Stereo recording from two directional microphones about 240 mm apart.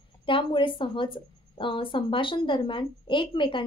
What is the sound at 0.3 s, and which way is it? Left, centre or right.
A woman's voice, left.